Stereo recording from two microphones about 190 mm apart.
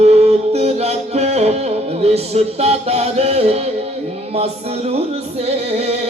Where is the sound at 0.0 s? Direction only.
35° right (ahead or behind).